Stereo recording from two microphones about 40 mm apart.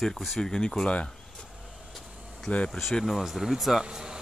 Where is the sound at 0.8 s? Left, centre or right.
Left.